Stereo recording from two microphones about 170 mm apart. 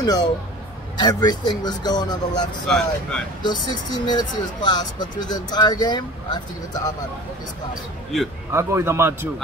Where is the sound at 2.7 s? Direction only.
5° left (ahead or behind).